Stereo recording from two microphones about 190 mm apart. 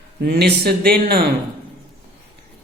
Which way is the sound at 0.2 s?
55° right (ahead or behind).